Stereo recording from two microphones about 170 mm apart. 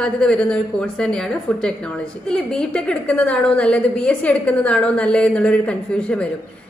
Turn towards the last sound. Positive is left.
turn(degrees=5)  # may be behind; listen again after turning